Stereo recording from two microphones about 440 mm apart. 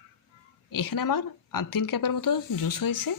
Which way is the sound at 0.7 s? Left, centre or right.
Left.